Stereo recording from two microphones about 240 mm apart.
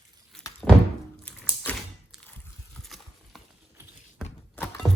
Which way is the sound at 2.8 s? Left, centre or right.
Centre.